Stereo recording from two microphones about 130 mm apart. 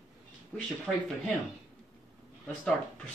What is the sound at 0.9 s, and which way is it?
Speech, 10° right (ahead or behind).